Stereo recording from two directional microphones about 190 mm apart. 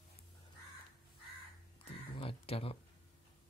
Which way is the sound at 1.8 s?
30° left (ahead or behind).